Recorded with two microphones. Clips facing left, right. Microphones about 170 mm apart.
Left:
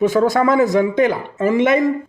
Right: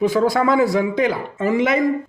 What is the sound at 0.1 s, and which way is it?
Speech, 45° left (ahead or behind).